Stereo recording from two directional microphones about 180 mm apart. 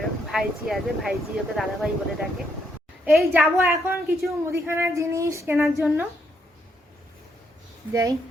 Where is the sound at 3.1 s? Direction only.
5° right (ahead or behind).